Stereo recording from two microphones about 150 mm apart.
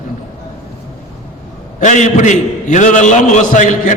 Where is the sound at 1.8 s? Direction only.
55° left (ahead or behind).